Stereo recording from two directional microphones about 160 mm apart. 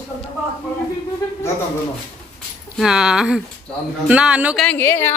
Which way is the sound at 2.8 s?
5° right (ahead or behind).